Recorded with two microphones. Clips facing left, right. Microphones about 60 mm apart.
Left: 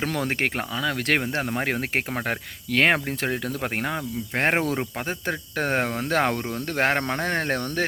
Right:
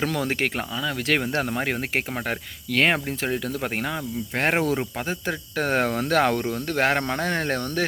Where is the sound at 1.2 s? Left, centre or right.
Left.